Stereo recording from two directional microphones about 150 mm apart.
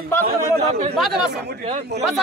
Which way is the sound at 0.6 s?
45° right (ahead or behind).